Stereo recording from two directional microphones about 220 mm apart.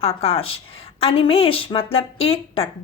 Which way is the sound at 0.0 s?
25° left (ahead or behind).